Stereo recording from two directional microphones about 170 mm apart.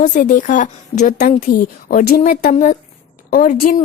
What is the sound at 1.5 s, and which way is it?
A woman's voice, 65° left (ahead or behind).